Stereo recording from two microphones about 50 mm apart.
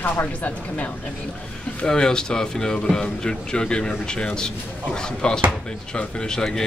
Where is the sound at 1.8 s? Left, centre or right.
Centre.